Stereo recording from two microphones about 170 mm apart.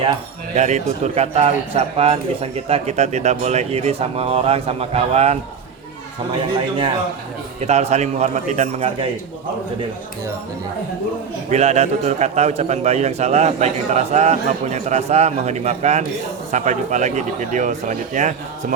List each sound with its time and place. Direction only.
0.5 s speech: 45° right (ahead or behind)
7.6 s speech: 40° right (ahead or behind)
11.5 s speech: 40° right (ahead or behind)